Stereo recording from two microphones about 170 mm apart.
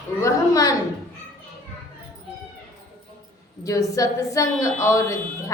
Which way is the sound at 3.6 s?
20° left (ahead or behind).